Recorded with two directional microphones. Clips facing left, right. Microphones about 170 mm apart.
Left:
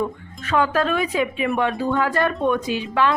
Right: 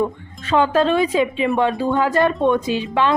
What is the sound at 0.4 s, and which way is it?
A woman's voice, 25° right (ahead or behind).